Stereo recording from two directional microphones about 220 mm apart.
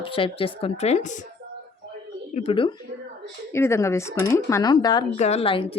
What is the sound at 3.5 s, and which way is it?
Speech, 10° left (ahead or behind).